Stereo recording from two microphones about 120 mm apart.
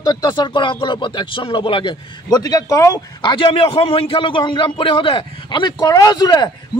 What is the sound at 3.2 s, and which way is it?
A man's voice, 40° left (ahead or behind).